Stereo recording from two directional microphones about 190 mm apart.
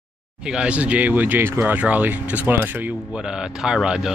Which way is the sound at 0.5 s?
5° right (ahead or behind).